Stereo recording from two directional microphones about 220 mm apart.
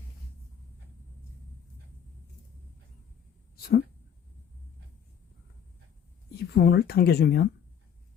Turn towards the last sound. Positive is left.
turn(degrees=45)  # may be behind; listen again after turning